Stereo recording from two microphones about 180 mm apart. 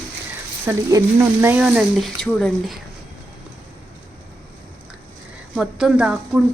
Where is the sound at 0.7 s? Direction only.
10° right (ahead or behind).